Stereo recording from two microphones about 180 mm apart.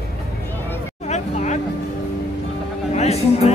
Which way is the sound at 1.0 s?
40° left (ahead or behind).